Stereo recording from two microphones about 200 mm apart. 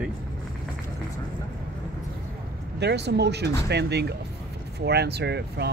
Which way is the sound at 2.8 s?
55° right (ahead or behind).